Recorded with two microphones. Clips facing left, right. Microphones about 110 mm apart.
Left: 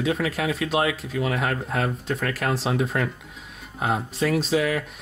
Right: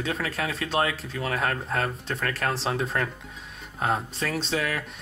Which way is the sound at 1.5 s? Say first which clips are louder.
Left 2 dB; 5° left (ahead or behind).